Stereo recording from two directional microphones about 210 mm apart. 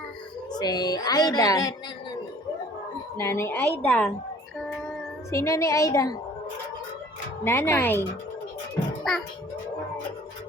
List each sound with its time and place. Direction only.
0.5 s a woman's voice: 20° left (ahead or behind)
3.2 s a woman's voice: 15° left (ahead or behind)
5.3 s a woman's voice: 15° left (ahead or behind)
7.4 s a woman's voice: 10° left (ahead or behind)